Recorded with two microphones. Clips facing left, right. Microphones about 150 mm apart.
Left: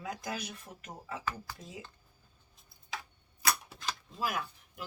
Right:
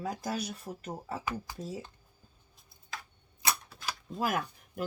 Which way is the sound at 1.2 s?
15° right (ahead or behind).